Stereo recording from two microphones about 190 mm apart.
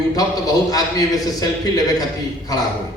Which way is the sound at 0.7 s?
20° left (ahead or behind).